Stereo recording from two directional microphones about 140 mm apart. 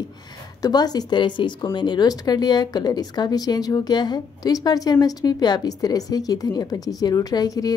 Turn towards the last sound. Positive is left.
turn(degrees=25)  # may be behind; listen again after turning